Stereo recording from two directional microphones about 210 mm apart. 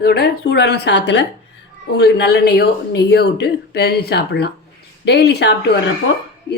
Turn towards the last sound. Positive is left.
turn(degrees=55)  # may be behind; listen again after turning